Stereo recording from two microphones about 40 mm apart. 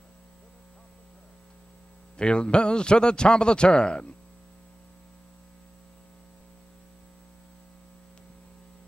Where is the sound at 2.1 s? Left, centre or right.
Left.